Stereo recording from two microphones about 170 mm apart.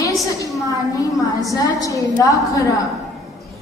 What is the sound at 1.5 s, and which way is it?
A woman's voice, 20° left (ahead or behind).